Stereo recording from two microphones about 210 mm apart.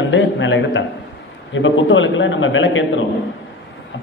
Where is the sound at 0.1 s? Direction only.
60° left (ahead or behind).